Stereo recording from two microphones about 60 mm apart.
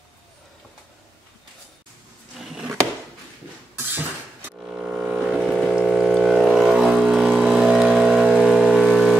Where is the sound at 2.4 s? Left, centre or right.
Centre.